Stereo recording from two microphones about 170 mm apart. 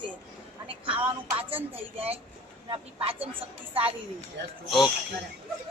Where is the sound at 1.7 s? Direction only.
35° right (ahead or behind).